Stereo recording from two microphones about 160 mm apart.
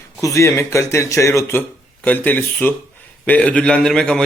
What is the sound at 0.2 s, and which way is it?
A man's voice, 20° left (ahead or behind).